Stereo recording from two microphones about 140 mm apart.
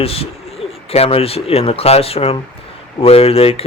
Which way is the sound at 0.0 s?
45° left (ahead or behind).